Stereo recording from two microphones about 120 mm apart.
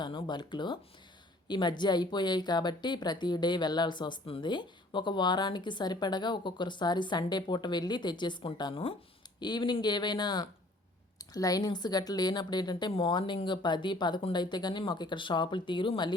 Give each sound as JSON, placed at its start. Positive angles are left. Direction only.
{"t": 0.0, "sound": "a woman's voice", "side_deg": 40}